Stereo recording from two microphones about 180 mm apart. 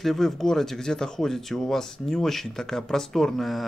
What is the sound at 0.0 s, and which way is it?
Speech, centre (ahead or behind).